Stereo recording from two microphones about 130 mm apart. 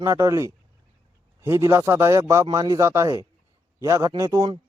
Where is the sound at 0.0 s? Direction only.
20° right (ahead or behind).